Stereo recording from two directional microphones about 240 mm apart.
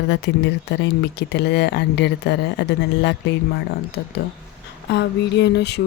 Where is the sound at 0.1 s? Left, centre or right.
Left.